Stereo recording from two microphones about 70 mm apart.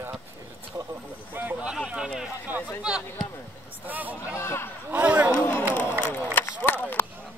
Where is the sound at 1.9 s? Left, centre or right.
Centre.